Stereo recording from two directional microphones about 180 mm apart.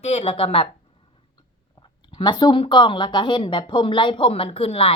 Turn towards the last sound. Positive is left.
turn(degrees=35)  # may be behind; listen again after turning